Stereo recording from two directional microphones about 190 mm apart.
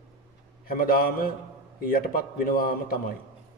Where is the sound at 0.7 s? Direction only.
50° left (ahead or behind).